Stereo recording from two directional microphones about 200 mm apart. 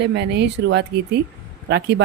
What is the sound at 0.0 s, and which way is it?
Speech, 60° right (ahead or behind).